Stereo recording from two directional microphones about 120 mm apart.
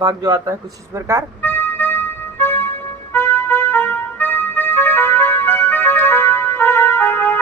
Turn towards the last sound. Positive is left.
turn(degrees=15)  # may be behind; listen again after turning